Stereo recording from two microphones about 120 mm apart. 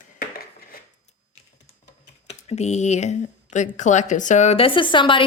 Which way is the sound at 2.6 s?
70° left (ahead or behind).